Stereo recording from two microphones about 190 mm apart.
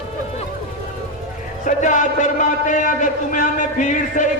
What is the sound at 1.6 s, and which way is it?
A man's voice, 40° left (ahead or behind).